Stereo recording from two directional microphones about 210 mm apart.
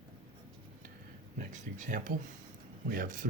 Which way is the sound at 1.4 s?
40° right (ahead or behind).